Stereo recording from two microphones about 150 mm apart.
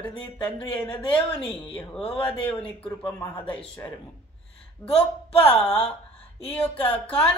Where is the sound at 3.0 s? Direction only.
25° left (ahead or behind).